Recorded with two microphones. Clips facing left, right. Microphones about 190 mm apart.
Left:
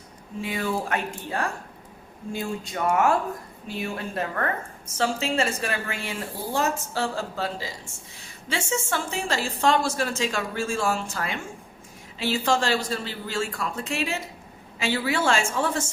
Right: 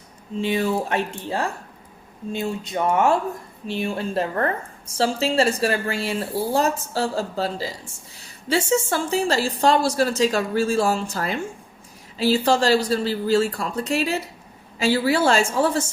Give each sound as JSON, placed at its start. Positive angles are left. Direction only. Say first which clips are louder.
{"t": 0.4, "sound": "a woman's voice", "louder": "right 5 dB", "side_deg": -25}